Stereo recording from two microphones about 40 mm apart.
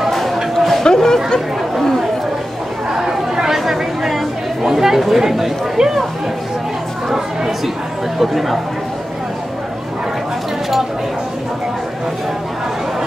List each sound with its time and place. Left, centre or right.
0.4 s a sound: centre
0.8 s chatter: centre
1.8 s chatter: centre
2.9 s chatter: centre
5.8 s speech: centre
7.1 s a sound: centre
8.2 s speech: centre